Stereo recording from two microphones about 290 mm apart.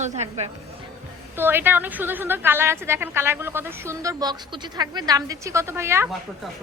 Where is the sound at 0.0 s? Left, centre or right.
Right.